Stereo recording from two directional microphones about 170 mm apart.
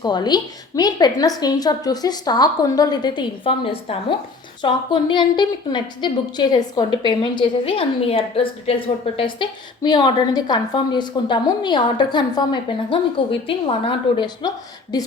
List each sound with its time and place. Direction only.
0.0 s a woman's voice: 25° left (ahead or behind)